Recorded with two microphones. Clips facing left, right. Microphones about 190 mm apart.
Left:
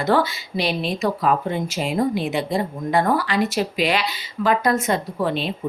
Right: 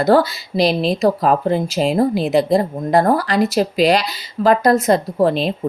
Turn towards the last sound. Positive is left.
turn(degrees=-40)  # may be behind; listen again after turning